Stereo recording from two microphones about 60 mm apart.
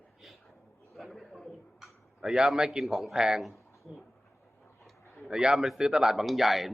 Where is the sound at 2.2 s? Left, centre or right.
Centre.